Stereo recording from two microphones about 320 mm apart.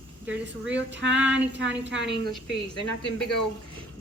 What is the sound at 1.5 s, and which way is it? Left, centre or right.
Speech, right.